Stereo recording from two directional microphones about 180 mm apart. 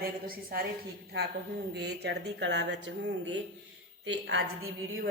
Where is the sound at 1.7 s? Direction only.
65° right (ahead or behind).